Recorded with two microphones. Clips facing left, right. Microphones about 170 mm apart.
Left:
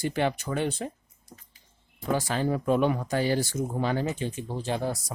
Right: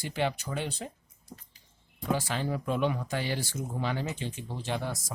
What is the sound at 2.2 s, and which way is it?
Speech, 45° left (ahead or behind).